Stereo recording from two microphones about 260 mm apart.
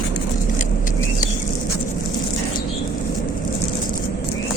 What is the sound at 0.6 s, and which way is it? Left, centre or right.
Vehicle, left.